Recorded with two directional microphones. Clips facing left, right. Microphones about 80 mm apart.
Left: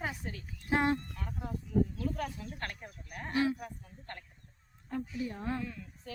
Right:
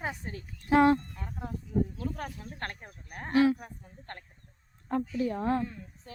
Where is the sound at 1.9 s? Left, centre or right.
Right.